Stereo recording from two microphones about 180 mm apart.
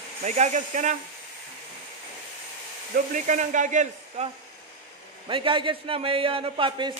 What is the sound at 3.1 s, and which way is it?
Speech, 45° right (ahead or behind).